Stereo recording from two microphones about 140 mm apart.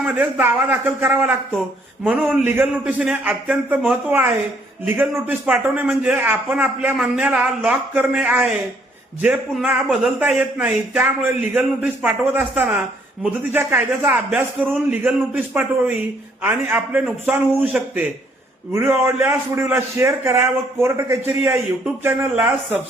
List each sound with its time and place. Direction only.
0.0 s a man's voice: 15° right (ahead or behind)